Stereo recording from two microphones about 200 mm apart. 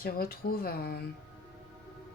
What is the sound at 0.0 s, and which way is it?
Speech, 45° left (ahead or behind).